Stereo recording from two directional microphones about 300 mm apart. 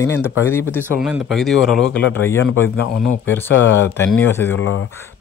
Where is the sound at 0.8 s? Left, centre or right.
Centre.